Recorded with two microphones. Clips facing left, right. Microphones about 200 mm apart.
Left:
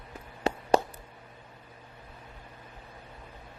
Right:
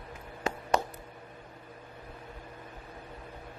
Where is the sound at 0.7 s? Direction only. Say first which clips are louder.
Left 5 dB; 30° left (ahead or behind).